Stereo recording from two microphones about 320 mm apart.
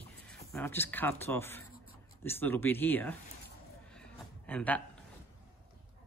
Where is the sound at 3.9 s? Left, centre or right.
Centre.